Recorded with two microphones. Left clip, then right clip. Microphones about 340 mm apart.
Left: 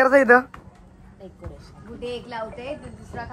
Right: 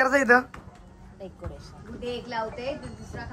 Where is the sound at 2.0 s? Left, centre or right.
Centre.